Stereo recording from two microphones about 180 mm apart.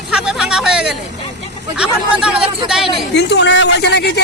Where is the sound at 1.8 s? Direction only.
5° right (ahead or behind).